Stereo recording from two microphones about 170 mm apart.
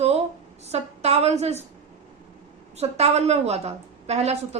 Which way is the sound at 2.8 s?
40° right (ahead or behind).